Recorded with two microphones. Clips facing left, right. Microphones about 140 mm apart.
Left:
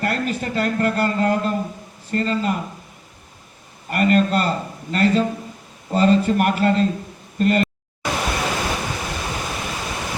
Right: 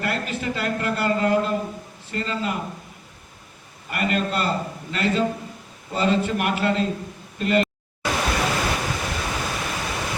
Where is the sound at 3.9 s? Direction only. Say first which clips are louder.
Left 7 dB; 40° left (ahead or behind).